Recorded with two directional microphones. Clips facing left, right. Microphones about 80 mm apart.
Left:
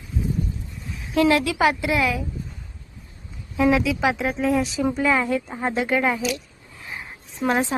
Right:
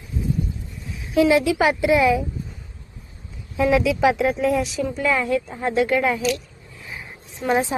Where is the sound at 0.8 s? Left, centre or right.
Centre.